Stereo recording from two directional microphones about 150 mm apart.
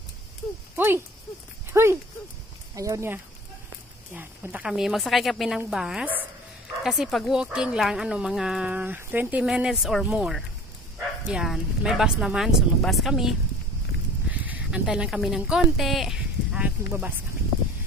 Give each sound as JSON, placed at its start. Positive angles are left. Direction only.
{"t": 0.7, "sound": "speech", "side_deg": -15}